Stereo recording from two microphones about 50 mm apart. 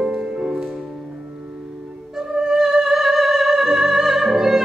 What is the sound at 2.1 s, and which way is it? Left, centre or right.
Music, centre.